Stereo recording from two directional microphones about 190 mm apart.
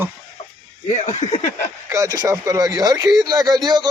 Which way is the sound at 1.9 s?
15° right (ahead or behind).